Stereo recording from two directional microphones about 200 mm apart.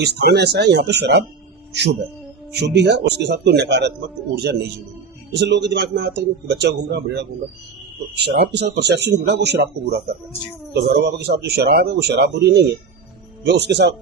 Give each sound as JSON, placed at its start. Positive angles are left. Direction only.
{"t": 0.0, "sound": "a man's voice", "side_deg": -55}
{"t": 2.6, "sound": "a man's voice", "side_deg": -55}
{"t": 5.3, "sound": "a man's voice", "side_deg": -60}